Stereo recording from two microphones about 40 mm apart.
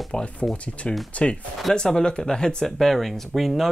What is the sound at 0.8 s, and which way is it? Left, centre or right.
Speech, left.